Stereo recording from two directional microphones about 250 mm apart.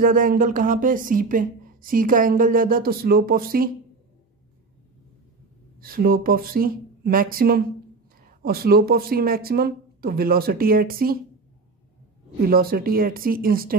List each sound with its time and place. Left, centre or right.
0.0 s speech: right
5.8 s speech: right
12.4 s speech: right